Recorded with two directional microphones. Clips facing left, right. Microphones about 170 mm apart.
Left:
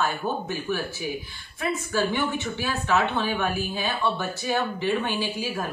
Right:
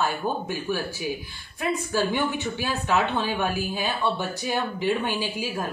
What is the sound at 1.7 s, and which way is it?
Speech, 15° right (ahead or behind).